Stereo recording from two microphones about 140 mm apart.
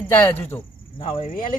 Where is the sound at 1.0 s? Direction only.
45° left (ahead or behind).